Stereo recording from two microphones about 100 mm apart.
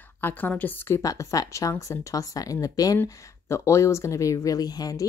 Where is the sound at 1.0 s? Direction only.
35° left (ahead or behind).